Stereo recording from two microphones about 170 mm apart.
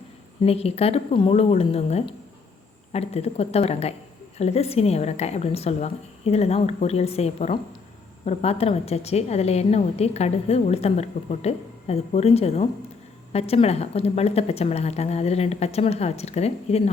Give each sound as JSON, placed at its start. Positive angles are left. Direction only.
{"t": 0.4, "sound": "a woman's voice", "side_deg": 35}